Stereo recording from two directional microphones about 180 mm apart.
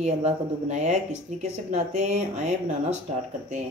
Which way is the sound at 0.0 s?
40° right (ahead or behind).